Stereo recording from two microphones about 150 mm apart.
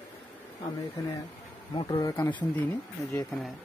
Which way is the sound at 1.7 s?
30° left (ahead or behind).